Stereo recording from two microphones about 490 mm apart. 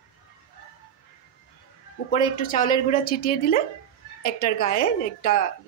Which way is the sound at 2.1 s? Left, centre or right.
Centre.